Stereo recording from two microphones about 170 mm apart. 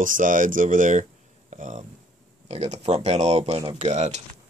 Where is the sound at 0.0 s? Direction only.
50° right (ahead or behind).